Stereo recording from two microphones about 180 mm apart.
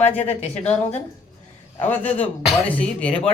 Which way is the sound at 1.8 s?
10° left (ahead or behind).